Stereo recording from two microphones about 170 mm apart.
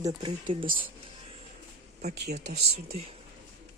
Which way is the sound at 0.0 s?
25° right (ahead or behind).